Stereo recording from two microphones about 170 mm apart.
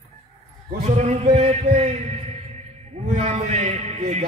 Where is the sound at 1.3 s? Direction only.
40° right (ahead or behind).